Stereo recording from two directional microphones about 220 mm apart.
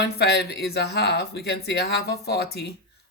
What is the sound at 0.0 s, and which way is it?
A man's voice, 50° left (ahead or behind).